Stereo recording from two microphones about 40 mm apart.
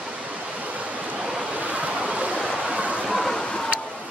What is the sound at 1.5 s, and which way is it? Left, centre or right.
Waves, right.